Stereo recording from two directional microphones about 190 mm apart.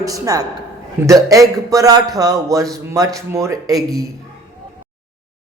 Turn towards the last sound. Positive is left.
turn(degrees=-20)  # may be behind; listen again after turning